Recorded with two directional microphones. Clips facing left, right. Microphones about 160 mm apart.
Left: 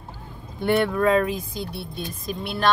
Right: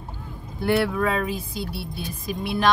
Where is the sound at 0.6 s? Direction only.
5° right (ahead or behind).